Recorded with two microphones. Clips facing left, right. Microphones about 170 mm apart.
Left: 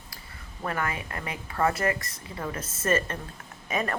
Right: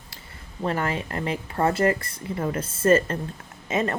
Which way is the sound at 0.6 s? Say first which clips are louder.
Right 5 dB; 25° right (ahead or behind).